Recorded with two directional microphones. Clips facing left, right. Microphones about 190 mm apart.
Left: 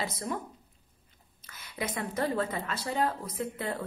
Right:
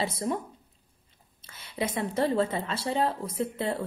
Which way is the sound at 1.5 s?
25° right (ahead or behind).